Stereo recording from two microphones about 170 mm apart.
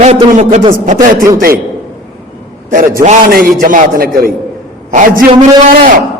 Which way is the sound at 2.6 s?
50° right (ahead or behind).